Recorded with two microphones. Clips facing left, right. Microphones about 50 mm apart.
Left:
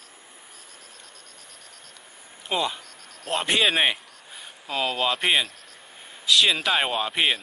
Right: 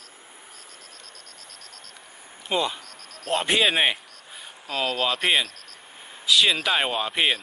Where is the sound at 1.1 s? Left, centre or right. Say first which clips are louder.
Right 2 dB; centre.